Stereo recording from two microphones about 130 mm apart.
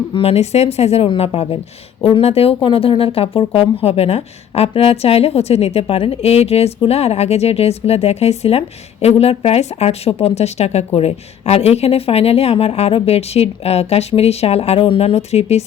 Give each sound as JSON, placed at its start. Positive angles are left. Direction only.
{"t": 0.1, "sound": "speech", "side_deg": 45}